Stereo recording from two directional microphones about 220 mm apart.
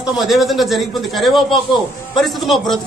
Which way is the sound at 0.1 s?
Centre (ahead or behind).